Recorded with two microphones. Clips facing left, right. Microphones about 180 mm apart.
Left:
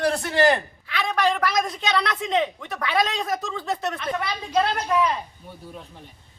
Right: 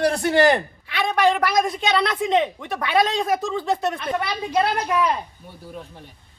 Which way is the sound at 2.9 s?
10° right (ahead or behind).